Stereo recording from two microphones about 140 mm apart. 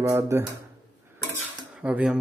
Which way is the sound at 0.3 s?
20° right (ahead or behind).